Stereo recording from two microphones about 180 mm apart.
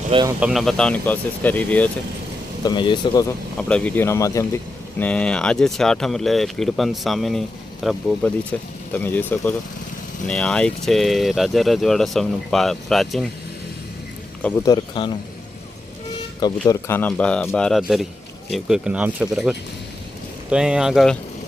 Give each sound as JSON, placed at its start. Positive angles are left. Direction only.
{"t": 0.1, "sound": "speech", "side_deg": -25}
{"t": 0.3, "sound": "speech", "side_deg": -5}
{"t": 2.6, "sound": "speech", "side_deg": 25}
{"t": 3.7, "sound": "speech", "side_deg": 5}
{"t": 14.4, "sound": "speech", "side_deg": 15}
{"t": 16.6, "sound": "speech", "side_deg": 10}